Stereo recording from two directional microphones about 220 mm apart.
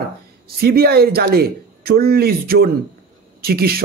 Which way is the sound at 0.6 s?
45° right (ahead or behind).